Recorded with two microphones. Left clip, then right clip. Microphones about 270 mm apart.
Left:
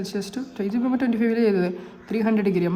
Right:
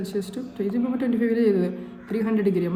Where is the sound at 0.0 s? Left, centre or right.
Left.